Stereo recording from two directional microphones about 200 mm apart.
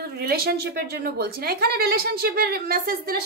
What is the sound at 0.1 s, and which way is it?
A woman's voice, 50° right (ahead or behind).